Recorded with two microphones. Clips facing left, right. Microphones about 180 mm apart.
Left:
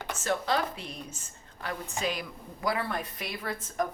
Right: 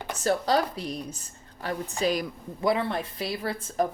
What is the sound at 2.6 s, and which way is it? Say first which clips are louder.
Speech: right 5 dB; 25° right (ahead or behind).